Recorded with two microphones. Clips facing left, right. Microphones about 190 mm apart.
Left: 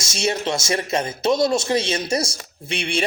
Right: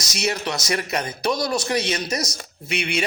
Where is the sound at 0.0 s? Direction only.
25° left (ahead or behind).